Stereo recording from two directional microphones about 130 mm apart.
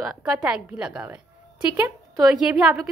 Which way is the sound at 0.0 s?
5° right (ahead or behind).